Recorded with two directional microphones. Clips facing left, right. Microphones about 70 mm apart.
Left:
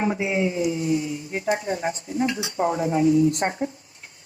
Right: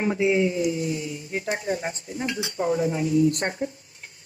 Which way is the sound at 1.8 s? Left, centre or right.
Left.